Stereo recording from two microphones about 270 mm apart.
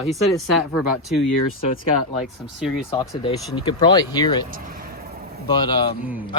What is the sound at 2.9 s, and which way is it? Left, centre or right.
Speech, centre.